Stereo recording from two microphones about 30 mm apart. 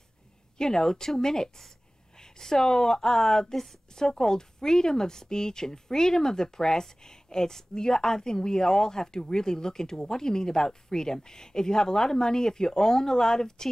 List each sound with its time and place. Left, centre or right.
0.6 s speech: centre